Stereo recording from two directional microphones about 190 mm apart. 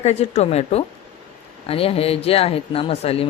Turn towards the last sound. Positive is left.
turn(degrees=30)  # may be behind; listen again after turning